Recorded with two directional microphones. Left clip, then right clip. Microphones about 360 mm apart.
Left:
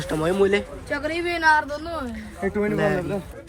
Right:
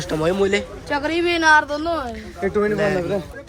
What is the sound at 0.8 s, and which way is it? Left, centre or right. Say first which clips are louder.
Speech: right 8 dB; centre.